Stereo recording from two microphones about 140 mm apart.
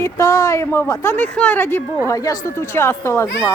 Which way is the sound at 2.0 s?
25° left (ahead or behind).